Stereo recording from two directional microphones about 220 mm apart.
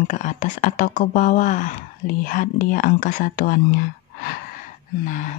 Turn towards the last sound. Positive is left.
turn(degrees=35)  # may be behind; listen again after turning